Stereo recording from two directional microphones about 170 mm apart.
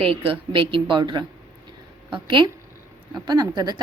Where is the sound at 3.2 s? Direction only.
25° right (ahead or behind).